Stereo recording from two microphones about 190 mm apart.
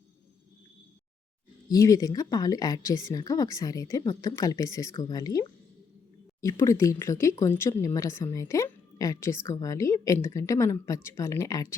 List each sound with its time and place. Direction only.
1.7 s speech: 15° left (ahead or behind)